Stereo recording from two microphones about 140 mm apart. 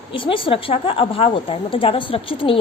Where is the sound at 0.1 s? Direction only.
40° left (ahead or behind).